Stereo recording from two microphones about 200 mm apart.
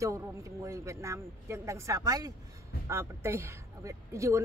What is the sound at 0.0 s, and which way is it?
Speech, 15° right (ahead or behind).